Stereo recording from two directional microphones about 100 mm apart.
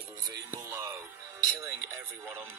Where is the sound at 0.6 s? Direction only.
30° right (ahead or behind).